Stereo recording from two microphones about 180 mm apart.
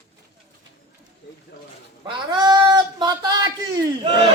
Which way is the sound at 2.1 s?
25° right (ahead or behind).